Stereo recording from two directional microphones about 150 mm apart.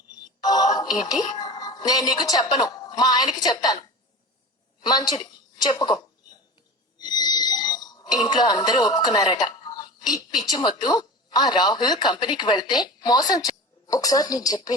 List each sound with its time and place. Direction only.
0.4 s music: 25° left (ahead or behind)
1.4 s a woman's voice: 25° left (ahead or behind)
7.0 s speech: 25° left (ahead or behind)